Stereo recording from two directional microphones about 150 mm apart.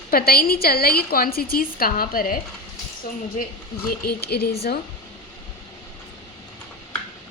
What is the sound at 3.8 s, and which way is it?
Speech, 90° left.